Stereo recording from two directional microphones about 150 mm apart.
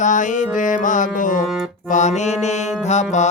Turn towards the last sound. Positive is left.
turn(degrees=50)  # may be behind; listen again after turning